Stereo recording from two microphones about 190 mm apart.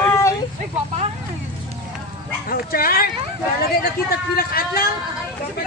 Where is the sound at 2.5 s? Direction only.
50° left (ahead or behind).